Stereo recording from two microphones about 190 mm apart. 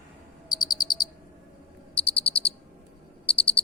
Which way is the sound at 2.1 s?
30° left (ahead or behind).